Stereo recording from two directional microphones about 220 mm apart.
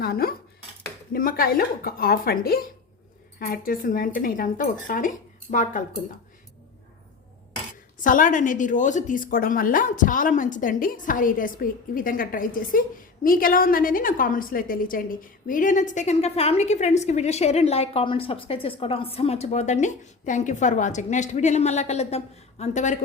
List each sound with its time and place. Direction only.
0.0 s dishes: 45° left (ahead or behind)
1.1 s a woman's voice: 40° left (ahead or behind)
8.0 s a woman's voice: 35° left (ahead or behind)